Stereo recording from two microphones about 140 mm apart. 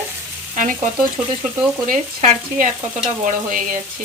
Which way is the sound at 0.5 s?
70° right (ahead or behind).